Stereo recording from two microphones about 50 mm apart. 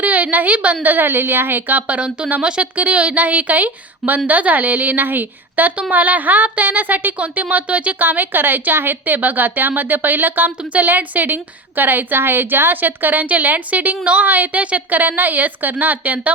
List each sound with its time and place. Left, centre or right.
0.0 s a woman's voice: right
2.7 s a woman's voice: right
8.0 s a woman's voice: right
10.6 s a woman's voice: right